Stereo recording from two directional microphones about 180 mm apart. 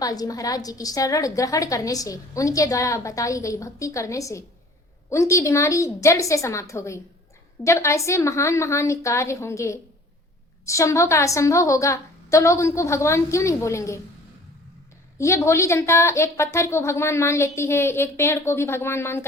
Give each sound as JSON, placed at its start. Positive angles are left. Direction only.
{"t": 0.0, "sound": "a woman's voice", "side_deg": 20}
{"t": 15.2, "sound": "a woman's voice", "side_deg": 15}